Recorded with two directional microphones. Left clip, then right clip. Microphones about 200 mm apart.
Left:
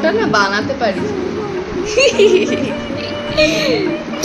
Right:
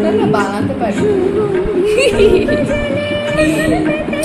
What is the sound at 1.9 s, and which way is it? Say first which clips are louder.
Speech: left 1 dB; centre (ahead or behind).